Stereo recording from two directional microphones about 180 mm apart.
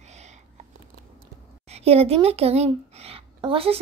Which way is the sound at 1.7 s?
35° right (ahead or behind).